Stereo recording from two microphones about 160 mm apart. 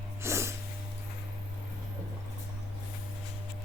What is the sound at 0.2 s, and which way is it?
Snort, 15° right (ahead or behind).